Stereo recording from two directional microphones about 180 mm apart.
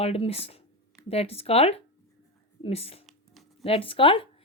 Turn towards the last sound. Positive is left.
turn(degrees=30)  # may be behind; listen again after turning